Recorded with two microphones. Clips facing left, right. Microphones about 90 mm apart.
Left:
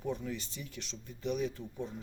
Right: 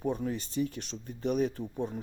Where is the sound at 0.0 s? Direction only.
45° right (ahead or behind).